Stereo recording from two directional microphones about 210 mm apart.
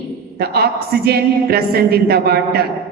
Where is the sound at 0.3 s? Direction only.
50° right (ahead or behind).